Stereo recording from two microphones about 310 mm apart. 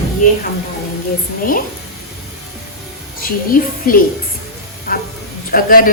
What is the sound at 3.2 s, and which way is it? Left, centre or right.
Speech, left.